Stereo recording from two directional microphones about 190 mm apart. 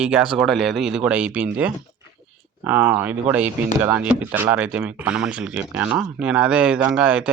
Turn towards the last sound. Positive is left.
turn(degrees=-5)  # may be behind; listen again after turning